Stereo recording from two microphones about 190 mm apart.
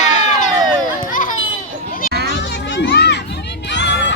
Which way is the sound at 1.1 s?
45° left (ahead or behind).